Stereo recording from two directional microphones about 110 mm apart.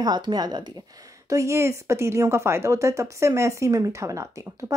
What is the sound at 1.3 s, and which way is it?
Speech, 25° right (ahead or behind).